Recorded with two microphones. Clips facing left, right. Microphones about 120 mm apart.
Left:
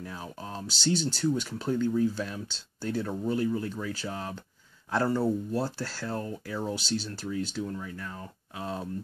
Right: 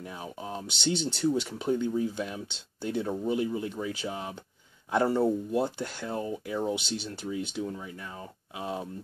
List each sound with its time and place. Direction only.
0.0 s speech: 15° right (ahead or behind)
1.6 s speech: 15° right (ahead or behind)
3.3 s speech: 10° right (ahead or behind)
4.9 s speech: 25° right (ahead or behind)